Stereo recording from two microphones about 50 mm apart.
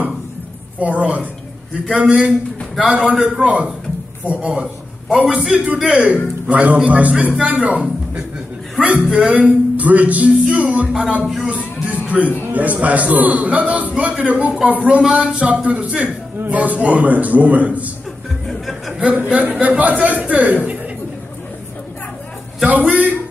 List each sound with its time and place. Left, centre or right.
0.7 s a man's voice: right
3.4 s a man's voice: right
6.4 s a man's voice: right
11.4 s music: right
12.5 s a man's voice: right
18.5 s music: centre
18.9 s a man's voice: right
22.7 s a man's voice: right